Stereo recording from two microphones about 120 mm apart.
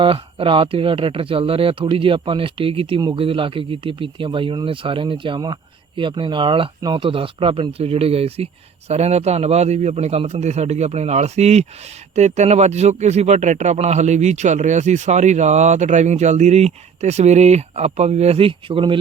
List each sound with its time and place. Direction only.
0.0 s a man's voice: 45° right (ahead or behind)